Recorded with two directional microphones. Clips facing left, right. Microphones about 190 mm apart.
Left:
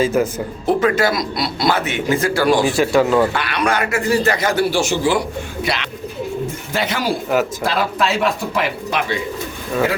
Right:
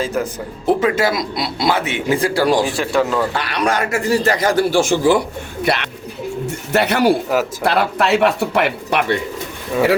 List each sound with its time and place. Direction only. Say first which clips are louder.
0.0 s speech: left 4 dB; 5° left (ahead or behind)
0.9 s speech: even; 25° right (ahead or behind)
2.6 s speech: left 3 dB; centre (ahead or behind)
3.3 s speech: even; 35° right (ahead or behind); by 9.1 s 65° right (ahead or behind)